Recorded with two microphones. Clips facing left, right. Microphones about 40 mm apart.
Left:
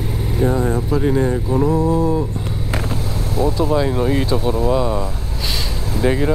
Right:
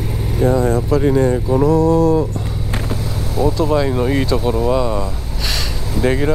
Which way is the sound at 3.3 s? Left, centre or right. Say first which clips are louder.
Right 2 dB; centre.